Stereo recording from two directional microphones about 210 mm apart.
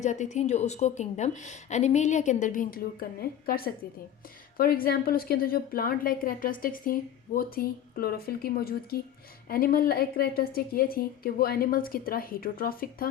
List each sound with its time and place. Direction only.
0.0 s a woman's voice: 35° left (ahead or behind)